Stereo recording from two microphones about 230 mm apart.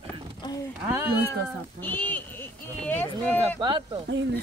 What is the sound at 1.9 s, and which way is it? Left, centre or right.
Speech, centre.